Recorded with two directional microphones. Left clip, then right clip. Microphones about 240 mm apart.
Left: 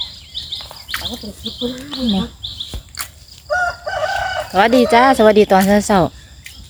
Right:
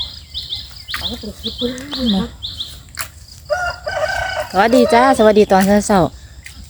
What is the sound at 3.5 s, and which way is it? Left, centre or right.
Chicken, right.